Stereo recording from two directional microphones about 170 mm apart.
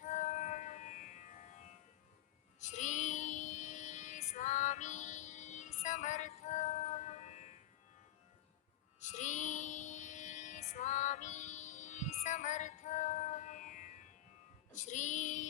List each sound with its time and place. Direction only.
0.0 s music: 40° left (ahead or behind)
2.6 s child singing: 45° left (ahead or behind)
9.0 s music: 45° left (ahead or behind)
14.7 s female singing: 45° left (ahead or behind)